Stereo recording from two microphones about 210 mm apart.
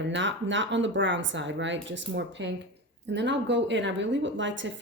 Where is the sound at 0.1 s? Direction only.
60° right (ahead or behind).